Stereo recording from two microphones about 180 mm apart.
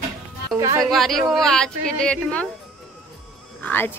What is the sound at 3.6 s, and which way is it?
Speech, 10° left (ahead or behind).